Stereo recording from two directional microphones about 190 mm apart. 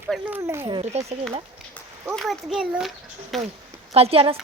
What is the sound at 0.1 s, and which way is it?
Speech, 10° right (ahead or behind).